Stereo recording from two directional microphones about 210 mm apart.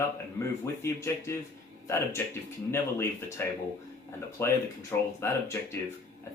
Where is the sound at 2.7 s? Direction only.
10° left (ahead or behind).